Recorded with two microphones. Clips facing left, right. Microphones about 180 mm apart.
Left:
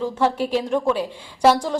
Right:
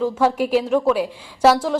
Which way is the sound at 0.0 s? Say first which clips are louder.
Right 2 dB; 10° right (ahead or behind).